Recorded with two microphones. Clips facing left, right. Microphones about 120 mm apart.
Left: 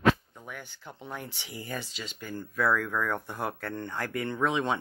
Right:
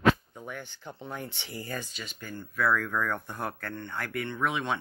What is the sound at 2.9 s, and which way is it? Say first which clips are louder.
Speech: even; 10° left (ahead or behind).